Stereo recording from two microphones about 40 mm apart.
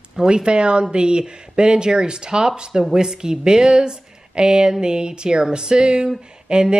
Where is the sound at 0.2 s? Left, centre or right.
Right.